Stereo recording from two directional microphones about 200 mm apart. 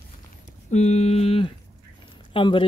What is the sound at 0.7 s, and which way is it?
Speech, 35° left (ahead or behind).